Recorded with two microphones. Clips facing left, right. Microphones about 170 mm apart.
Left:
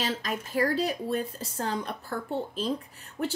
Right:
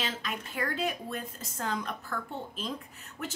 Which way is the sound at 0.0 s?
40° left (ahead or behind).